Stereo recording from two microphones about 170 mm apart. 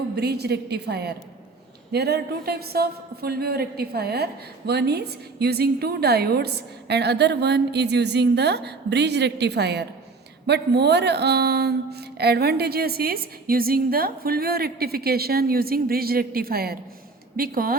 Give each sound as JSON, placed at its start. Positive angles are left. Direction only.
{"t": 0.2, "sound": "speech", "side_deg": -70}